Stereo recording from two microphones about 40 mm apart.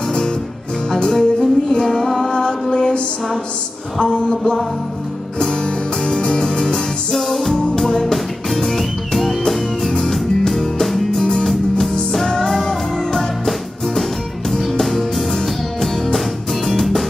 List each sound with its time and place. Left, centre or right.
1.1 s music: centre
2.7 s a sound: left
4.0 s music: centre
6.0 s music: centre
7.1 s music: centre
12.1 s music: centre